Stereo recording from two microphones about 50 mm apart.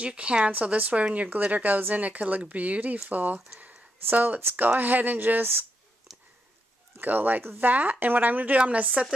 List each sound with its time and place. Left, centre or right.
0.0 s speech: right
7.0 s speech: right